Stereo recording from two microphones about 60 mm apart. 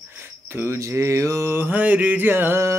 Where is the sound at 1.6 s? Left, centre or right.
Right.